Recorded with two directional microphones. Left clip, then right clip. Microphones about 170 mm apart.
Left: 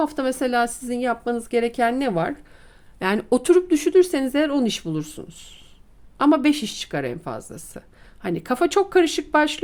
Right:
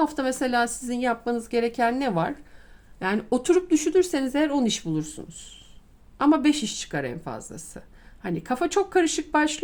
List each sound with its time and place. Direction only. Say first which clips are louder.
0.0 s speech: left 2 dB; 20° left (ahead or behind)
3.0 s a woman's voice: left 4 dB; 35° left (ahead or behind)